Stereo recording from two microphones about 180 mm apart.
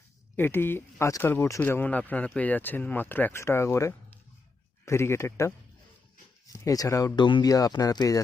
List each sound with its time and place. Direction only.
0.3 s speech: 10° left (ahead or behind)